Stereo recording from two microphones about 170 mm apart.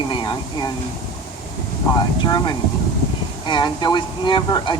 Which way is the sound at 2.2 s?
25° left (ahead or behind).